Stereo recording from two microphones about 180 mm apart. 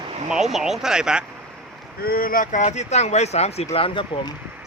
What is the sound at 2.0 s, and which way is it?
Speech, 55° left (ahead or behind).